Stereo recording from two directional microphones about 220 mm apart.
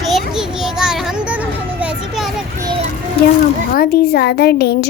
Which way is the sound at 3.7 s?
45° left (ahead or behind).